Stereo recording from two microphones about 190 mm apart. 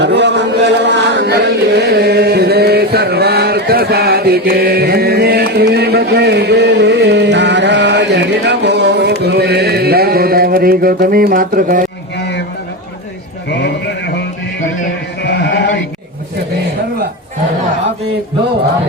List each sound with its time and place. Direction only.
0.0 s chant: 65° right (ahead or behind)
9.2 s mantra: 60° right (ahead or behind)
13.5 s a man's voice: 65° left (ahead or behind)
15.2 s sheep: 65° left (ahead or behind)